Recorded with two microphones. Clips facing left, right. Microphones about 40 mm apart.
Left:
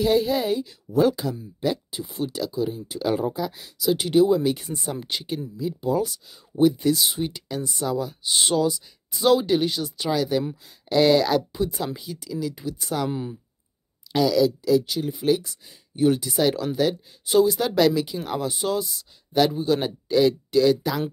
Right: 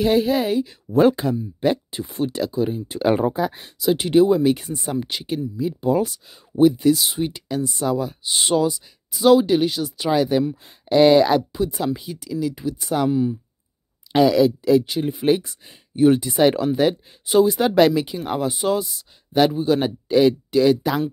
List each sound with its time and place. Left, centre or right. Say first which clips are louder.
0.0 s speech: right 3 dB; centre
0.9 s speech: right 4 dB; right
3.6 s speech: right 3 dB; right
5.6 s speech: right 4 dB; centre
6.8 s speech: right 4 dB; centre
10.0 s speech: right 5 dB; centre
11.5 s speech: right 4 dB; centre
14.1 s speech: right 4 dB; right